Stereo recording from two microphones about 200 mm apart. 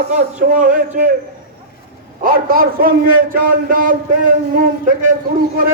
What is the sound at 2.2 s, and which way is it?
A man's voice, 45° right (ahead or behind).